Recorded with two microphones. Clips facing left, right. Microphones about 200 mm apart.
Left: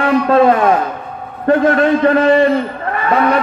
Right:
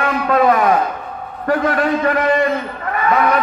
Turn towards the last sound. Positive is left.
turn(degrees=30)  # may be behind; listen again after turning